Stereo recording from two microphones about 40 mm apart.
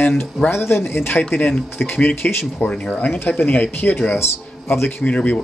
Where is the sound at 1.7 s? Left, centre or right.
Left.